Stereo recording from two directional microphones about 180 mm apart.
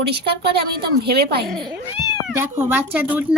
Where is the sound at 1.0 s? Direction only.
65° right (ahead or behind).